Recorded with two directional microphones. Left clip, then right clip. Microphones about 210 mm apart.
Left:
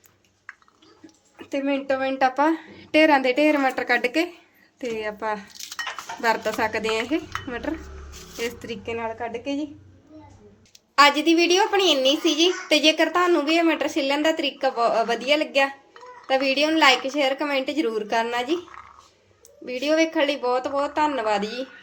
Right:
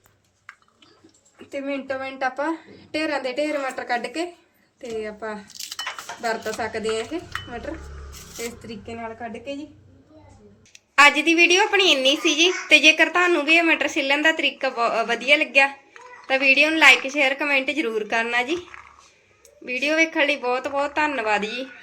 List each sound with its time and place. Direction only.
1.5 s a woman's voice: 55° left (ahead or behind)
10.9 s a woman's voice: 5° left (ahead or behind)